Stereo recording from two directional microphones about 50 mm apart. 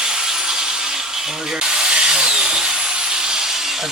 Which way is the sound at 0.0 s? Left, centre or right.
Centre.